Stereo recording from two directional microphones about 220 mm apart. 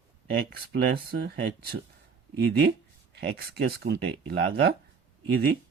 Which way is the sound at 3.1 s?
50° right (ahead or behind).